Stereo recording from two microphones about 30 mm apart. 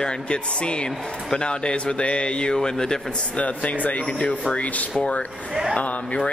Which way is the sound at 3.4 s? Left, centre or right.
Left.